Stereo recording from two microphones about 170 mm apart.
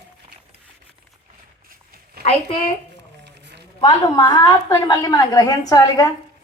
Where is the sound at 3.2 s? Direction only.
90° right.